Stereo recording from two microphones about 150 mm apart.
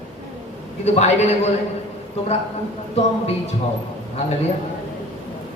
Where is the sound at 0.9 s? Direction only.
45° left (ahead or behind).